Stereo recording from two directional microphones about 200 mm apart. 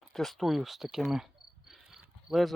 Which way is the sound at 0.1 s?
Centre (ahead or behind).